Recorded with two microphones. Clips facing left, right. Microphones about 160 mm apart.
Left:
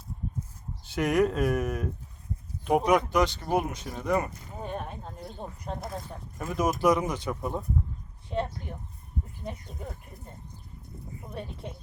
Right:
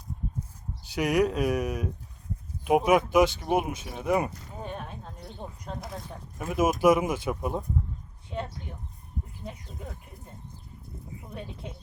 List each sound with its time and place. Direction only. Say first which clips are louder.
0.9 s speech: even; centre (ahead or behind)
4.4 s speech: left 2 dB; centre (ahead or behind)
6.4 s speech: right 3 dB; 10° right (ahead or behind)